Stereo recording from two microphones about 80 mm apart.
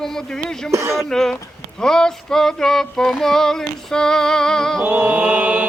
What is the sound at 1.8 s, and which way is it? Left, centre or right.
Female singing, centre.